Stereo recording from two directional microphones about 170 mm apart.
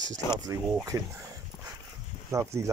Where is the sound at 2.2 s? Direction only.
15° right (ahead or behind).